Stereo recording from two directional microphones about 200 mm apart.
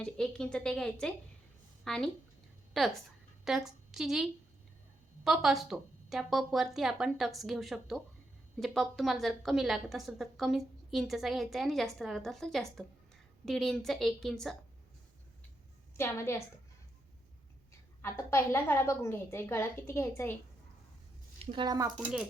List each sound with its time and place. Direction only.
0.0 s a woman's voice: 5° left (ahead or behind)
16.0 s a woman's voice: 15° left (ahead or behind)
18.0 s a woman's voice: 15° left (ahead or behind)
21.3 s a woman's voice: 25° right (ahead or behind)